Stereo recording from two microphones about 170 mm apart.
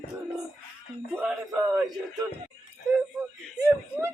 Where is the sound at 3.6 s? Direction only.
15° right (ahead or behind).